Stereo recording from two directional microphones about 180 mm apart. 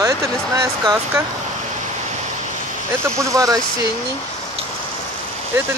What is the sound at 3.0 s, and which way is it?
Speech, 15° right (ahead or behind).